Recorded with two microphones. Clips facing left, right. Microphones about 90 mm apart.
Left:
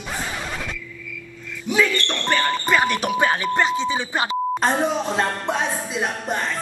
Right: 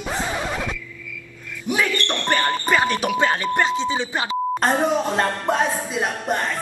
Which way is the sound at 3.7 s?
25° right (ahead or behind).